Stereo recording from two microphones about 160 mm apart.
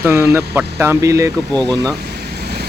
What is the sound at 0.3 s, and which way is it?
Speech, 15° right (ahead or behind).